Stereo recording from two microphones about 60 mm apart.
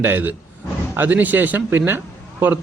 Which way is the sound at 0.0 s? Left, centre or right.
Right.